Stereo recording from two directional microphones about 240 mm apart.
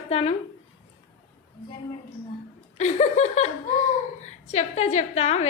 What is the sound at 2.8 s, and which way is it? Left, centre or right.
A woman's voice, left.